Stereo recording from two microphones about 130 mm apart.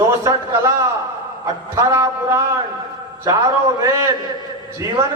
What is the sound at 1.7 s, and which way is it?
A man's voice, 25° right (ahead or behind).